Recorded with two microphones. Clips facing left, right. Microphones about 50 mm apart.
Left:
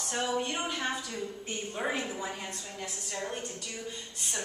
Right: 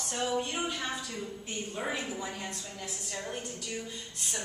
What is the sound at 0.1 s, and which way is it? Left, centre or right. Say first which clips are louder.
Speech: left 1 dB; centre.